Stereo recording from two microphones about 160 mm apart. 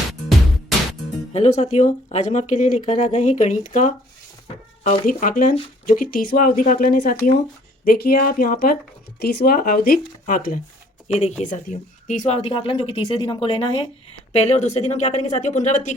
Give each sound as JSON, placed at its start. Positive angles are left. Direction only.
{"t": 1.3, "sound": "speech", "side_deg": 45}
{"t": 5.0, "sound": "speech", "side_deg": 60}
{"t": 9.2, "sound": "speech", "side_deg": 80}
{"t": 11.1, "sound": "speech", "side_deg": 40}
{"t": 11.4, "sound": "speech", "side_deg": 50}